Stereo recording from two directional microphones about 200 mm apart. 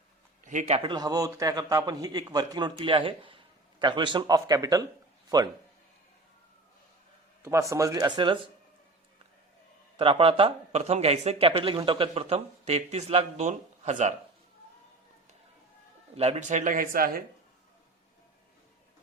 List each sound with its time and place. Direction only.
0.4 s speech: 35° right (ahead or behind)
0.8 s a man's voice: 20° right (ahead or behind)
7.4 s speech: 15° right (ahead or behind)
10.0 s speech: 30° right (ahead or behind)
16.1 s speech: 30° right (ahead or behind)